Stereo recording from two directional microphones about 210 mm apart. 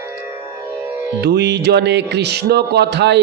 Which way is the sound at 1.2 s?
55° right (ahead or behind).